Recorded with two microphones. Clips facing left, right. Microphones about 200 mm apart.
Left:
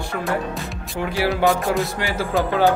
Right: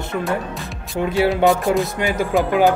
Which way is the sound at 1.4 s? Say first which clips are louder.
Right 1 dB; centre (ahead or behind).